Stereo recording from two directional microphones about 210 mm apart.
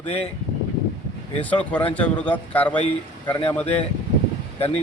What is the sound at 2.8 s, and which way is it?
Speech, 25° left (ahead or behind).